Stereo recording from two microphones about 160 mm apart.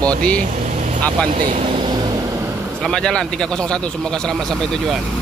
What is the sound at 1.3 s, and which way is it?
Speech, 55° right (ahead or behind).